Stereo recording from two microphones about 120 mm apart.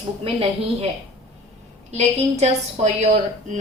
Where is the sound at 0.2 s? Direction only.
50° right (ahead or behind).